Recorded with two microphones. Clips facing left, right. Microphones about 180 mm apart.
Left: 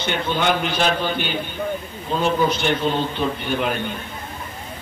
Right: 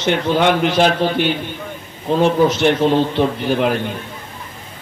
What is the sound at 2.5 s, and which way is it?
A man's voice, 90° right.